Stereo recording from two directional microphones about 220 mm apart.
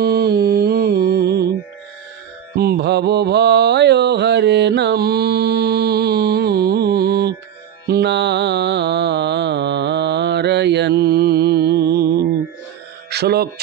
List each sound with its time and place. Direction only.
0.0 s music: 45° right (ahead or behind)
2.5 s mantra: 45° right (ahead or behind)
7.8 s music: 50° right (ahead or behind)
13.1 s speech: 45° right (ahead or behind)